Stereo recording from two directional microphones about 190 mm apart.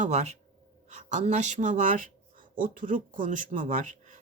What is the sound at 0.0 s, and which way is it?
Speech, 35° right (ahead or behind).